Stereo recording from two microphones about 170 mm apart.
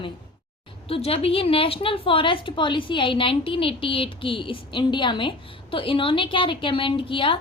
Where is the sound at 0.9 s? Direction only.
35° left (ahead or behind).